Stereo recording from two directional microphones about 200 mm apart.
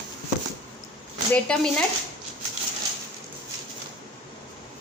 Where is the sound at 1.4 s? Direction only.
5° left (ahead or behind).